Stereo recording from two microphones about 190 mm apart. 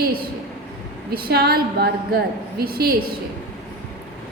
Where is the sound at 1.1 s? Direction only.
55° right (ahead or behind).